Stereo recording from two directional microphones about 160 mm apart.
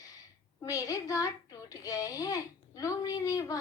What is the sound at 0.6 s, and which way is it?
A woman's voice, 20° left (ahead or behind).